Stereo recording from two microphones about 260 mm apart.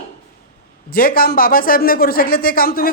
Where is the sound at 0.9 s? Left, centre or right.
Left.